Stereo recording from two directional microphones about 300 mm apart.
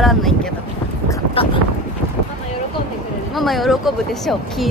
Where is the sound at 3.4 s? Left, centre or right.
Centre.